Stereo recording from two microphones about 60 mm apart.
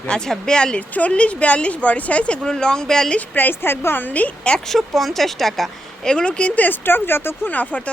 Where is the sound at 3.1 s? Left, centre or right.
Left.